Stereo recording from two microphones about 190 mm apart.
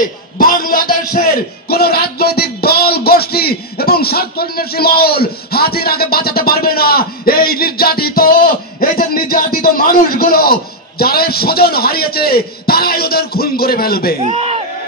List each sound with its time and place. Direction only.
0.0 s a man's voice: 50° left (ahead or behind)
14.2 s speech: 30° right (ahead or behind)